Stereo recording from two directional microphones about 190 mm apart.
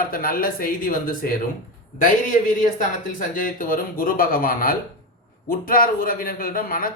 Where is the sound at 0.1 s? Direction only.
50° left (ahead or behind).